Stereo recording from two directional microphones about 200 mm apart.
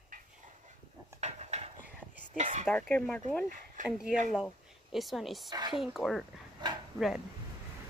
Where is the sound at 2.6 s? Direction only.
5° left (ahead or behind).